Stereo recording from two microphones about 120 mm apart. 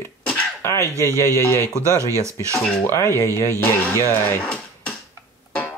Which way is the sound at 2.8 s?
20° left (ahead or behind).